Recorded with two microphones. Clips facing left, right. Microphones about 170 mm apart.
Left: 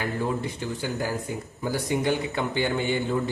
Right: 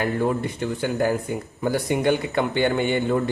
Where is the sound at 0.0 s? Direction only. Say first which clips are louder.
Right 5 dB; 60° right (ahead or behind).